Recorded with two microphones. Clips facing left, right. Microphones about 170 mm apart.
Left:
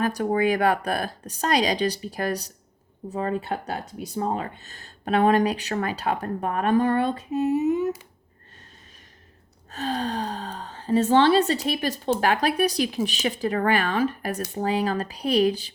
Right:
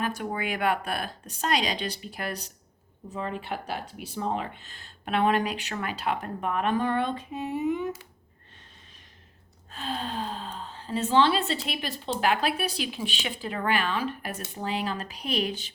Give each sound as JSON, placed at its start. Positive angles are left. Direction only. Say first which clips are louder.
{"t": 0.0, "sound": "speech", "louder": "left 8 dB", "side_deg": 40}
{"t": 9.7, "sound": "speech", "louder": "left 5 dB", "side_deg": 45}